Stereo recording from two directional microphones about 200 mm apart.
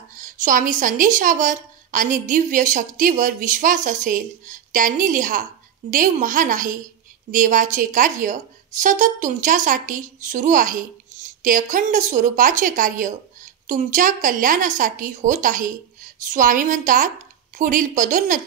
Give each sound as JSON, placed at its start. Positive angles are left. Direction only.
{"t": 0.2, "sound": "a woman's voice", "side_deg": -40}